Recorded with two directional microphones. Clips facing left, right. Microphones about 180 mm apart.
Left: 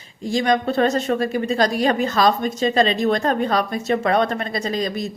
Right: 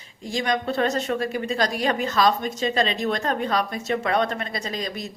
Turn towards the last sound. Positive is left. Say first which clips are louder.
# left 7 dB
turn(degrees=40)  # may be behind; listen again after turning